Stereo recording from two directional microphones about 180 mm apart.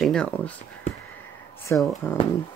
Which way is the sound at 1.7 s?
10° left (ahead or behind).